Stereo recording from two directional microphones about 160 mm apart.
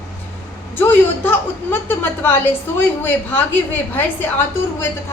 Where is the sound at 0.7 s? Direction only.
10° left (ahead or behind).